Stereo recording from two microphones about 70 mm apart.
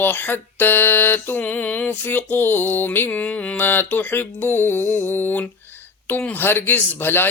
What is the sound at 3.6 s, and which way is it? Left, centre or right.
Speech, left.